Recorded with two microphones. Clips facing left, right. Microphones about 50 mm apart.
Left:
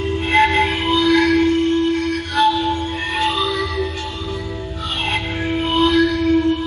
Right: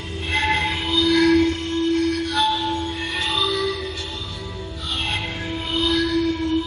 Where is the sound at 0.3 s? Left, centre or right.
Left.